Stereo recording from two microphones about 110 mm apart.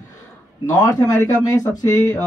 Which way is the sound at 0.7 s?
35° left (ahead or behind).